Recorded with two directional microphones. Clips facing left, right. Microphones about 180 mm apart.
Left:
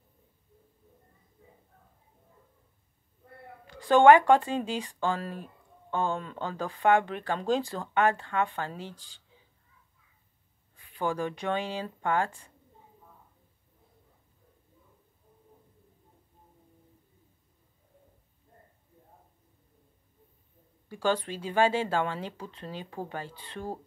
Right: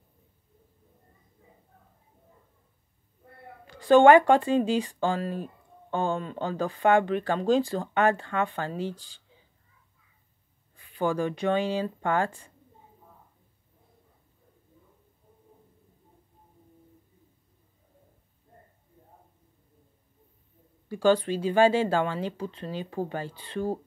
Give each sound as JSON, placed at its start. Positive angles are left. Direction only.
{"t": 3.8, "sound": "speech", "side_deg": -30}
{"t": 11.0, "sound": "speech", "side_deg": -35}
{"t": 21.0, "sound": "speech", "side_deg": -30}